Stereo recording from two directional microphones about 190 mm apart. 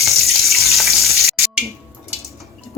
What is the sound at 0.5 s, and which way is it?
Water, centre (ahead or behind).